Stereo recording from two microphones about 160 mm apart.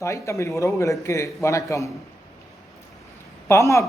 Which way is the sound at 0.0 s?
20° left (ahead or behind).